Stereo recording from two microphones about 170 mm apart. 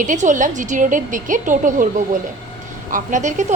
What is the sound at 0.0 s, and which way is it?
A woman's voice, 45° right (ahead or behind).